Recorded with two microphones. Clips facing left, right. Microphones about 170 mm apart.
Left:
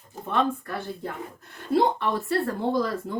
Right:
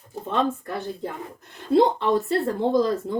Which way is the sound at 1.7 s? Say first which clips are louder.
Right 4 dB; 20° right (ahead or behind).